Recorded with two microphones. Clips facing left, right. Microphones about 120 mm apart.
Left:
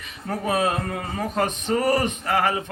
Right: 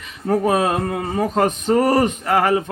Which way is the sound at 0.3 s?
40° right (ahead or behind).